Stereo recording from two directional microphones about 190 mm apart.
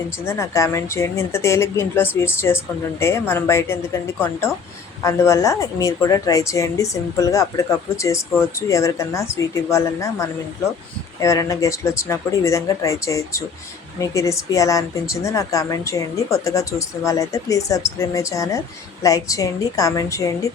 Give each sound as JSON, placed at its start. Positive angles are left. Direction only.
{"t": 0.3, "sound": "a woman's voice", "side_deg": 15}